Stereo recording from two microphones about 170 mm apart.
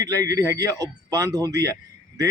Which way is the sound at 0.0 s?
20° right (ahead or behind).